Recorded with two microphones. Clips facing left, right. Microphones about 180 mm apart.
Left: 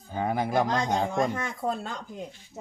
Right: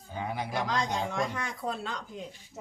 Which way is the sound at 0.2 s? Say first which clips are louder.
Left 7 dB; 50° left (ahead or behind).